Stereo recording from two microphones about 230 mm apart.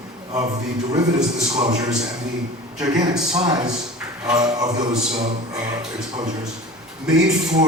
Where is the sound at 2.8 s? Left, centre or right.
Centre.